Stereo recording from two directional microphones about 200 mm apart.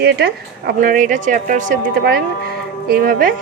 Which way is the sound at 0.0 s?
55° right (ahead or behind).